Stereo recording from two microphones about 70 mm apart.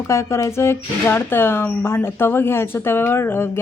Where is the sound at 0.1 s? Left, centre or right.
Left.